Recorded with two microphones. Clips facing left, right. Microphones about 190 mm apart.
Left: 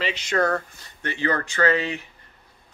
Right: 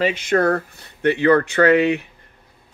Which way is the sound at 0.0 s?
50° right (ahead or behind).